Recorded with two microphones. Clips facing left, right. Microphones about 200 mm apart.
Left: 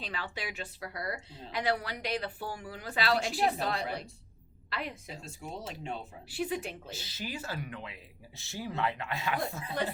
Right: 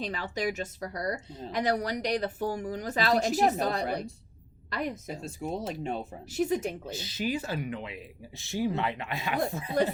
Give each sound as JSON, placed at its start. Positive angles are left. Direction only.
{"t": 0.0, "sound": "speech", "side_deg": -40}
{"t": 6.9, "sound": "speech", "side_deg": -20}